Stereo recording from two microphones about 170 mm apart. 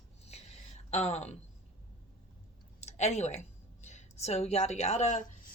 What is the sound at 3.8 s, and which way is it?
A woman's voice, 40° left (ahead or behind).